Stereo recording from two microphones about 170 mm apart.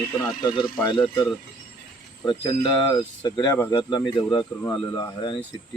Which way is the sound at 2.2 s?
30° left (ahead or behind).